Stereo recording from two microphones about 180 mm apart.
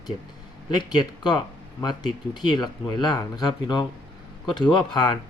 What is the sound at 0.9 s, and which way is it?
Speech, 25° left (ahead or behind).